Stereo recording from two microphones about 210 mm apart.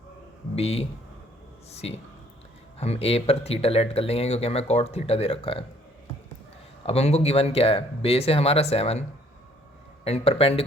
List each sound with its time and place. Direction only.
0.5 s speech: 30° left (ahead or behind)
6.8 s speech: 30° left (ahead or behind)